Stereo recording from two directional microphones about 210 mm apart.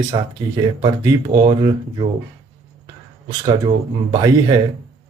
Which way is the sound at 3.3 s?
20° right (ahead or behind).